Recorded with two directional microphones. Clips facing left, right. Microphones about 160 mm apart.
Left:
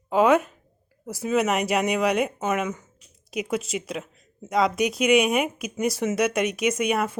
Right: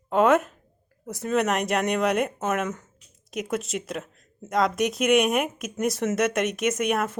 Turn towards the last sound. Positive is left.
turn(degrees=0)  # may be behind; listen again after turning